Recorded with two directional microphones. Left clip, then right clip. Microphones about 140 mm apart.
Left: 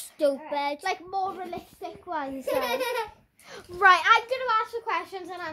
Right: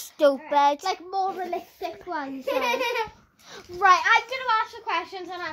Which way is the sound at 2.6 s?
35° left (ahead or behind).